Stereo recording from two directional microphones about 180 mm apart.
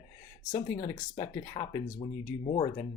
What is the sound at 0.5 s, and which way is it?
Speech, 20° left (ahead or behind).